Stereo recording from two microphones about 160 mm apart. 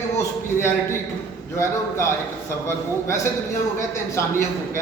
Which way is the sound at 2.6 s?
15° left (ahead or behind).